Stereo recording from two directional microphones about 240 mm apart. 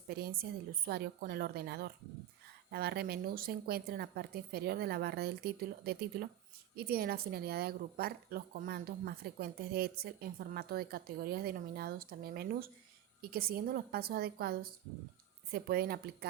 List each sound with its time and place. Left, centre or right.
0.1 s a woman's voice: right